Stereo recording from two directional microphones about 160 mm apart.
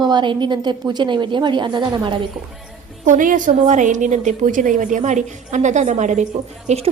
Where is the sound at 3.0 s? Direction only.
55° right (ahead or behind).